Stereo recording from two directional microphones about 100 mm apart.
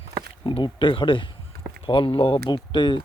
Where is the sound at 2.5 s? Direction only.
50° left (ahead or behind).